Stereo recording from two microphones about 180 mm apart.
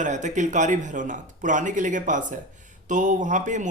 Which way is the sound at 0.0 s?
45° right (ahead or behind).